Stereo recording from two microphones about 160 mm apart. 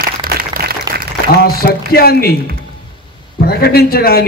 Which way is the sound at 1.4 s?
70° left (ahead or behind).